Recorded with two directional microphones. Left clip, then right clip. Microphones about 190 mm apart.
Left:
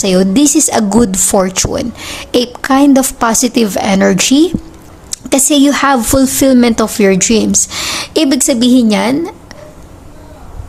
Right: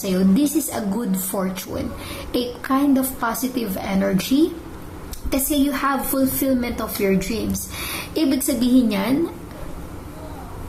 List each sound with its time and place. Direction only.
0.0 s a woman's voice: 45° left (ahead or behind)